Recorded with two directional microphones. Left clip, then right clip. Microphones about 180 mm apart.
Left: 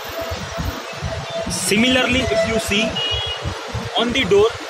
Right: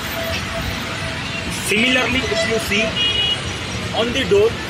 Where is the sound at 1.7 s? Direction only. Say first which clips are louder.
Even; 65° left (ahead or behind).